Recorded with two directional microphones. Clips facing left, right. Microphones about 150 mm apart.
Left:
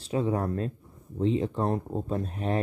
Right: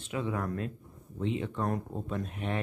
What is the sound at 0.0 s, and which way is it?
Speech, 35° left (ahead or behind).